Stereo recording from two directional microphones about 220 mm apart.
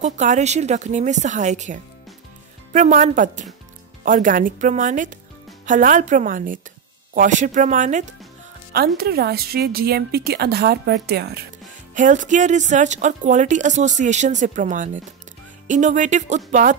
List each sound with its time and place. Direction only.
0.0 s speech: 30° right (ahead or behind)
8.7 s a woman's voice: 45° right (ahead or behind)
11.9 s speech: 35° right (ahead or behind)